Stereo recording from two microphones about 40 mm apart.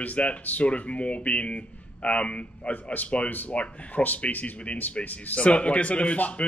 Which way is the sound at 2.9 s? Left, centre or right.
Left.